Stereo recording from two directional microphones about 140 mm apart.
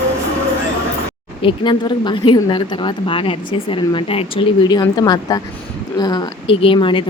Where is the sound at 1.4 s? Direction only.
35° left (ahead or behind).